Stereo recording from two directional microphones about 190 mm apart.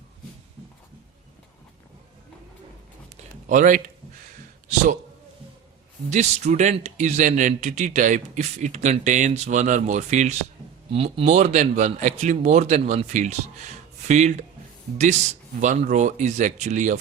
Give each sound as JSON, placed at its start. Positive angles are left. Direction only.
{"t": 3.5, "sound": "a man's voice", "side_deg": -40}
{"t": 6.1, "sound": "speech", "side_deg": -35}
{"t": 15.6, "sound": "speech", "side_deg": -40}